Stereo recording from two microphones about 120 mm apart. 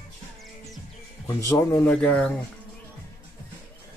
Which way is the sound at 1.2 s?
25° left (ahead or behind).